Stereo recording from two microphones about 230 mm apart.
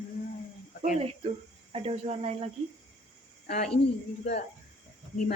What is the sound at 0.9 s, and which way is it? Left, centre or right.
Speech, right.